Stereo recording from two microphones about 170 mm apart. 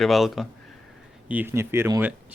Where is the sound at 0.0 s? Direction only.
Centre (ahead or behind).